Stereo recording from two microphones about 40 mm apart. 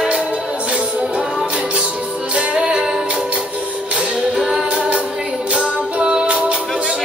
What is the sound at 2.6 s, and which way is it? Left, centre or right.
Music, centre.